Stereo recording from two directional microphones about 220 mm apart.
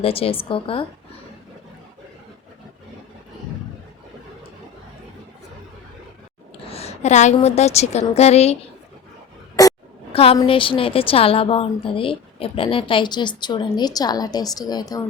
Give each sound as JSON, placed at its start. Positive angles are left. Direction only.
{"t": 0.0, "sound": "a woman's voice", "side_deg": 25}
{"t": 6.7, "sound": "a woman's voice", "side_deg": 30}
{"t": 9.6, "sound": "a woman's voice", "side_deg": 20}